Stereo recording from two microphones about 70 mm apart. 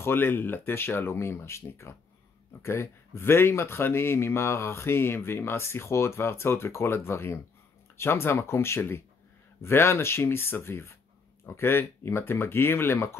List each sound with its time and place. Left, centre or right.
0.0 s speech: left